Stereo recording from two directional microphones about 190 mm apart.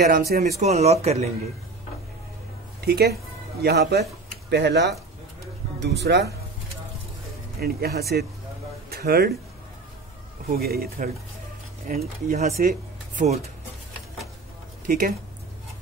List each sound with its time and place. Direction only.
0.3 s speech: 55° right (ahead or behind)
0.6 s speech: 35° right (ahead or behind)
2.8 s speech: 55° right (ahead or behind)
7.6 s speech: 55° right (ahead or behind)
10.5 s speech: 55° right (ahead or behind); by 13.5 s 35° right (ahead or behind)
14.9 s speech: 45° right (ahead or behind)